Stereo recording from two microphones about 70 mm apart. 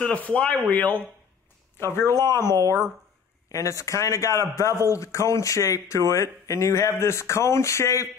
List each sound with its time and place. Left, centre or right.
0.0 s speech: left
1.8 s speech: left
3.4 s a man's voice: left